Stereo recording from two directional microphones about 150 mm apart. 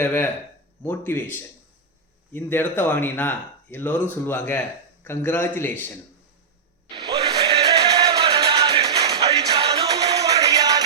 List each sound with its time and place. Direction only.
0.0 s speech: 15° left (ahead or behind)
6.8 s music: 40° right (ahead or behind)
8.8 s music: 25° right (ahead or behind)
9.2 s music: 40° right (ahead or behind)
10.2 s music: 25° right (ahead or behind)